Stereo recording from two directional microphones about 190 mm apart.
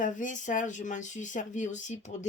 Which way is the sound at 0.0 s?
40° left (ahead or behind).